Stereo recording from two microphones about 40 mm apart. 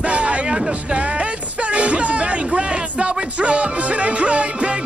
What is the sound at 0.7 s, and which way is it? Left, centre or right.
Music, right.